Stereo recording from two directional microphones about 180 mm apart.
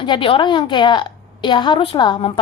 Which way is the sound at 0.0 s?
30° left (ahead or behind).